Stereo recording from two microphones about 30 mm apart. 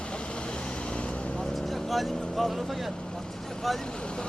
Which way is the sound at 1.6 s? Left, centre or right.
Centre.